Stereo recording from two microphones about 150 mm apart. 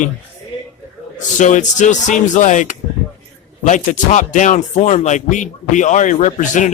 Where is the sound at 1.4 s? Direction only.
55° left (ahead or behind).